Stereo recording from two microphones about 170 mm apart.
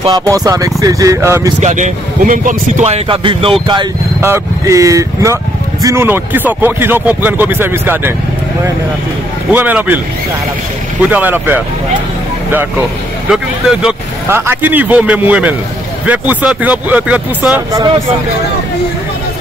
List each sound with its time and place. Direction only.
0.0 s speech: 20° right (ahead or behind)
1.6 s a man's voice: 45° right (ahead or behind)
4.2 s speech: 15° right (ahead or behind)
9.5 s speech: 10° right (ahead or behind)
11.0 s speech: 10° right (ahead or behind)
17.6 s speech: 20° right (ahead or behind)